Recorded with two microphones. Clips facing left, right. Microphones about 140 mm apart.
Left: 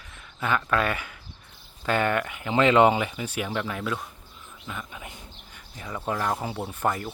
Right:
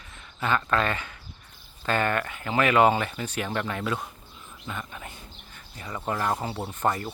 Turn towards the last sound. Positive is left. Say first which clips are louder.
# even
turn(degrees=5)  # may be behind; listen again after turning